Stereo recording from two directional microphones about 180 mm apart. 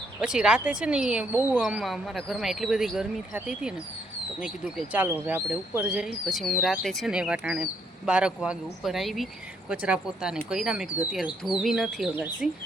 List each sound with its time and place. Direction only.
0.2 s speech: 5° right (ahead or behind)